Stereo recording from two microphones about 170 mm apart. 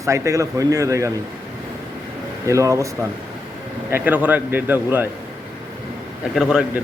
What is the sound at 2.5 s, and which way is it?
Speech, 20° right (ahead or behind).